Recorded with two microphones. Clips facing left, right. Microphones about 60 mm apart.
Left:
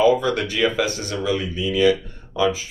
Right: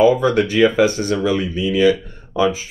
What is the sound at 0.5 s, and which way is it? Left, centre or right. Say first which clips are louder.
Speech: right 7 dB; right.